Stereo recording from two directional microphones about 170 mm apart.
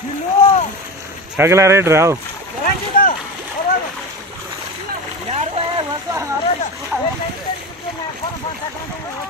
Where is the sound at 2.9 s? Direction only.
55° left (ahead or behind).